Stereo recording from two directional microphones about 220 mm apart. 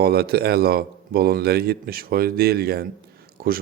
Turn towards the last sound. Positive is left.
turn(degrees=-40)  # may be behind; listen again after turning